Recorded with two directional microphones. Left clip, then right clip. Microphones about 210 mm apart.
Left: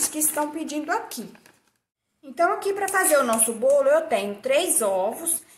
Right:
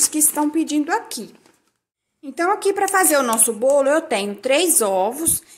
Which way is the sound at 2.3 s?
40° right (ahead or behind).